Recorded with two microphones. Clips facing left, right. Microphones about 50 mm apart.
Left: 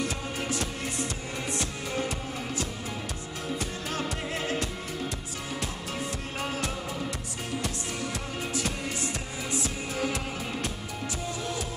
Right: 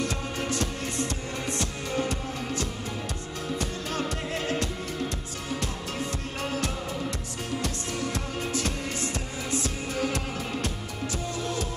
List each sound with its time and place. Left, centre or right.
0.0 s music: centre
6.4 s music: centre